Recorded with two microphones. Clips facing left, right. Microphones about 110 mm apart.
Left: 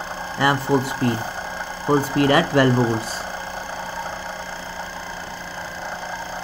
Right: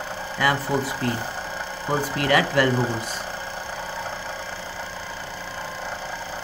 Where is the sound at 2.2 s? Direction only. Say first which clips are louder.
Left 2 dB; 25° left (ahead or behind).